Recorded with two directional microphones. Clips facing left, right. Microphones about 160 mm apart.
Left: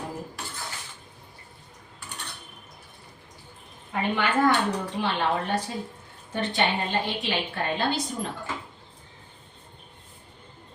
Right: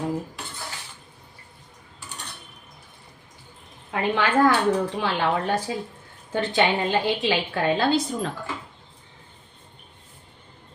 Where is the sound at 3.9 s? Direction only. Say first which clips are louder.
Right 3 dB; 90° right.